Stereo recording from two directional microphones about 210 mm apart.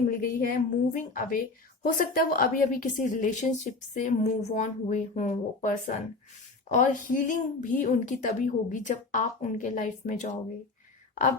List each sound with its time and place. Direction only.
0.2 s a woman's voice: 40° left (ahead or behind)